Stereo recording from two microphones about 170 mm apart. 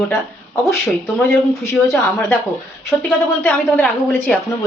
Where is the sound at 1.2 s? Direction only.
15° left (ahead or behind).